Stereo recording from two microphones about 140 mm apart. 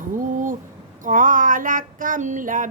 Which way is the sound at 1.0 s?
70° right (ahead or behind).